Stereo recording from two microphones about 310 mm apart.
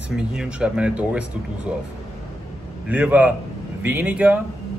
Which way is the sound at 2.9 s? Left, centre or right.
Centre.